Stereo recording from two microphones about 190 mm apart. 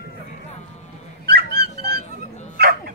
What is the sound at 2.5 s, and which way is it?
Bow-wow, 55° right (ahead or behind).